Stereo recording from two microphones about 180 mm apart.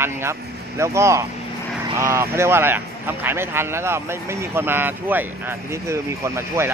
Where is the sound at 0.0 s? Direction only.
15° right (ahead or behind).